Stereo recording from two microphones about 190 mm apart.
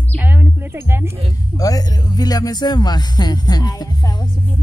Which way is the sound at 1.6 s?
20° left (ahead or behind).